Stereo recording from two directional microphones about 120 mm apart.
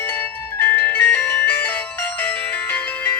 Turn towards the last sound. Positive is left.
turn(degrees=15)  # may be behind; listen again after turning